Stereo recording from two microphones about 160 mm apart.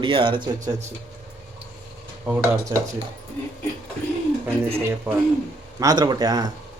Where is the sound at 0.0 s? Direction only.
30° right (ahead or behind).